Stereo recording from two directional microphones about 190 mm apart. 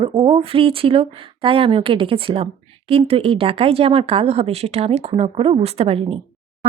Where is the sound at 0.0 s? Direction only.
25° right (ahead or behind).